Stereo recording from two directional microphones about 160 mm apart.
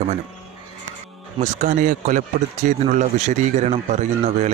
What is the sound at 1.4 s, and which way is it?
Speech, 50° right (ahead or behind).